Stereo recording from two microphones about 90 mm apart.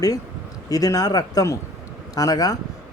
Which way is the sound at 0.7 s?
40° left (ahead or behind).